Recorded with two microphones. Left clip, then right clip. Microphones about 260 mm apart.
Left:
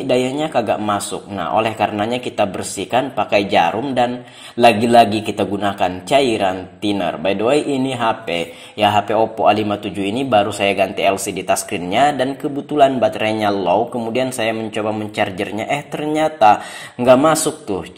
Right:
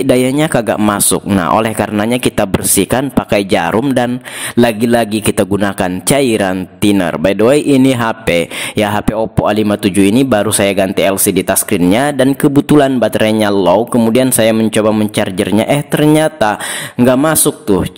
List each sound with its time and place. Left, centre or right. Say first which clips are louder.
0.1 s a man's voice: right 5 dB; right
9.9 s speech: right 11 dB; right
10.3 s speech: right 3 dB; right